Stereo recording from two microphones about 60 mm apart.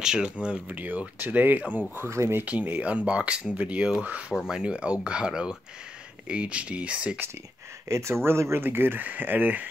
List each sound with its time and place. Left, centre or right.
0.0 s speech: centre
0.7 s speech: right
2.0 s speech: right
2.4 s speech: right
7.9 s speech: right